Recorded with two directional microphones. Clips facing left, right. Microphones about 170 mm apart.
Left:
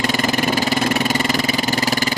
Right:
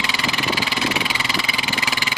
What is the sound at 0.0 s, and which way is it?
Vehicle, 45° left (ahead or behind).